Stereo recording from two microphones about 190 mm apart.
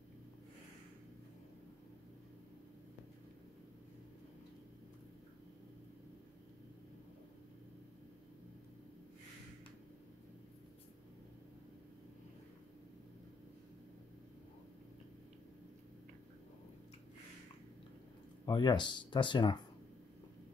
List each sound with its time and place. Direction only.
18.4 s speech: 20° left (ahead or behind)